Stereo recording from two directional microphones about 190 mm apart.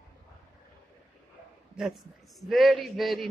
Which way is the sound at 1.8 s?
5° right (ahead or behind).